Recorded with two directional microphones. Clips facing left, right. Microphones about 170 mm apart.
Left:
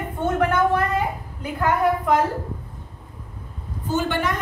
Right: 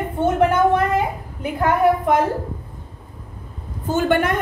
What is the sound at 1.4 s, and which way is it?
Speech, 20° right (ahead or behind).